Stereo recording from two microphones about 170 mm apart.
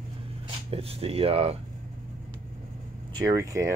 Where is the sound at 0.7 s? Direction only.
35° right (ahead or behind).